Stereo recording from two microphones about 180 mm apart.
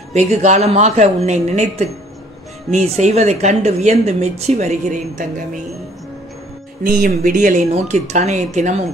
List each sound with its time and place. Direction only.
0.1 s speech: 40° right (ahead or behind)
3.0 s speech: 40° right (ahead or behind)
6.8 s speech: 50° right (ahead or behind)